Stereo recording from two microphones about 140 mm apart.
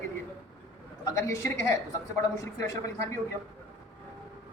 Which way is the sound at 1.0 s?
20° left (ahead or behind).